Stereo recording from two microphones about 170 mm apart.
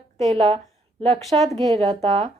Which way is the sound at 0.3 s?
40° right (ahead or behind).